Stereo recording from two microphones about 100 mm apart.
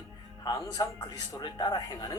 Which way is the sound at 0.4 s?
40° left (ahead or behind).